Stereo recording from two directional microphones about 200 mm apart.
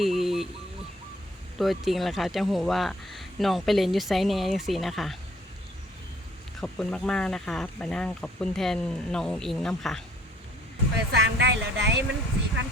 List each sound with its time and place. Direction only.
0.0 s a sound: centre (ahead or behind)
1.5 s speech: centre (ahead or behind)
6.6 s speech: 5° left (ahead or behind)
10.9 s speech: 60° right (ahead or behind)